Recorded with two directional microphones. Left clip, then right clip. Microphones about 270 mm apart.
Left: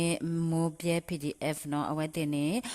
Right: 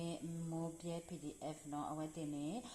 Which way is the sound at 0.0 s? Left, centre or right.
Left.